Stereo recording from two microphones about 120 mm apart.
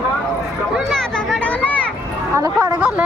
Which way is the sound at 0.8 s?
Centre (ahead or behind).